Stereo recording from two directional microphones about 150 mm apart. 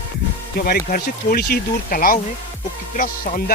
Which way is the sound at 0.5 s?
85° left.